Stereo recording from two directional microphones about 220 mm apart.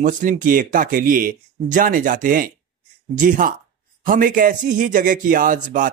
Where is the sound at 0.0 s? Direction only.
35° right (ahead or behind).